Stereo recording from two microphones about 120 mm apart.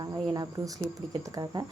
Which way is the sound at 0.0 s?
30° right (ahead or behind).